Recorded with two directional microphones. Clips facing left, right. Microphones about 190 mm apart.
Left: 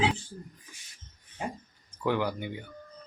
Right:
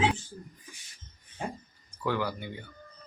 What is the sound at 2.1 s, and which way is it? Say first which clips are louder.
Speech: left 2 dB; 15° left (ahead or behind).